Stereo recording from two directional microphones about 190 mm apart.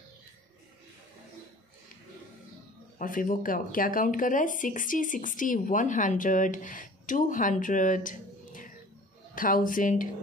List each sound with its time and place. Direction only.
3.0 s speech: 45° left (ahead or behind)